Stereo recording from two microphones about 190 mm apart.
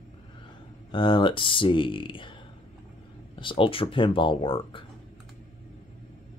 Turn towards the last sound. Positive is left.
turn(degrees=30)  # may be behind; listen again after turning